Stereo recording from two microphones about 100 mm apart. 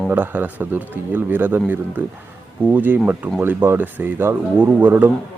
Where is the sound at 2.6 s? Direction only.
15° right (ahead or behind).